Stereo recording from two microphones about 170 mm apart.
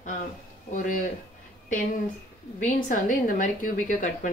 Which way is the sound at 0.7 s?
50° left (ahead or behind).